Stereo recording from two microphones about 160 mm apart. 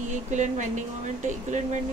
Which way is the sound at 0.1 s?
50° right (ahead or behind).